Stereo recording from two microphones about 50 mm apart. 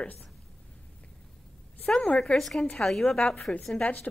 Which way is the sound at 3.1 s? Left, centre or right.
Left.